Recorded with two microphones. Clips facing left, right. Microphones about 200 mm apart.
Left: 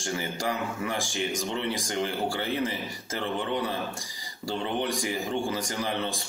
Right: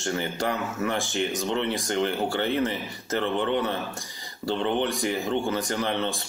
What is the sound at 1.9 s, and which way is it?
Speech, 10° left (ahead or behind).